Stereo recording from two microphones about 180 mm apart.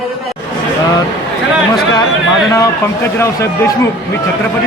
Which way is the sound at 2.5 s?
15° left (ahead or behind).